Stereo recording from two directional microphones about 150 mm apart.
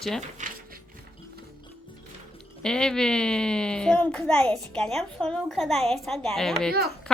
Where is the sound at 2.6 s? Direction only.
5° left (ahead or behind).